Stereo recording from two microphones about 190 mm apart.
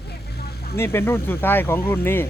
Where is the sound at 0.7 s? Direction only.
10° left (ahead or behind).